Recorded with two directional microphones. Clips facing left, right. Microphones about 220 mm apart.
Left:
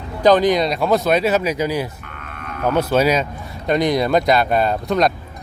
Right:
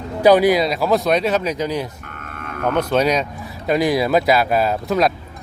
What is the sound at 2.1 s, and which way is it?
Sheep, 45° right (ahead or behind).